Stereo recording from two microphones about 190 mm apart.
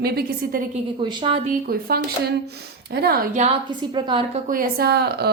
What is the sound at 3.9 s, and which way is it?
Speech, 25° right (ahead or behind).